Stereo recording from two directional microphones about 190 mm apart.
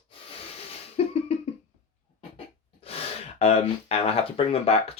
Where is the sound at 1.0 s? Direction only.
30° left (ahead or behind).